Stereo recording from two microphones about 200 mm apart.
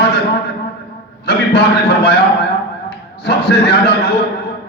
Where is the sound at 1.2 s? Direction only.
55° left (ahead or behind).